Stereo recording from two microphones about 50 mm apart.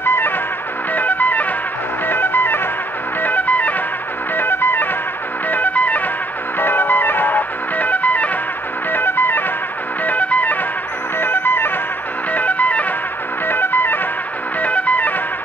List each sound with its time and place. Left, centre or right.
0.0 s music: left
0.9 s music: left
4.4 s music: left
5.5 s music: left
8.9 s music: left
10.0 s music: left
12.3 s music: left
13.5 s music: left
14.6 s music: left